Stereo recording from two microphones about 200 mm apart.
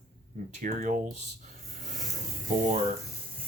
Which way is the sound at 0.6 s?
40° right (ahead or behind).